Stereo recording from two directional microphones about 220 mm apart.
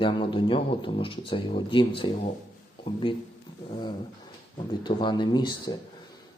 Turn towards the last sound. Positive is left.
turn(degrees=20)  # may be behind; listen again after turning